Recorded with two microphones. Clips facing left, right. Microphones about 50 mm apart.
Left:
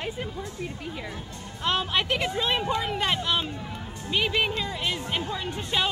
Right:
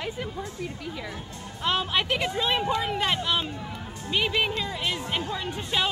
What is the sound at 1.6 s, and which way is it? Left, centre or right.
Speech, centre.